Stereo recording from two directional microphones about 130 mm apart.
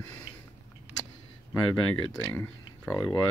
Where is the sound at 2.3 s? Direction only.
10° left (ahead or behind).